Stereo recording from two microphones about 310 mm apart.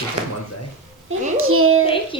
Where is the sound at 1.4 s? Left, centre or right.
Right.